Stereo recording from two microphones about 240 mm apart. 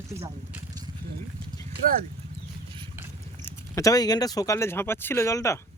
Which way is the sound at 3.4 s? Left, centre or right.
Centre.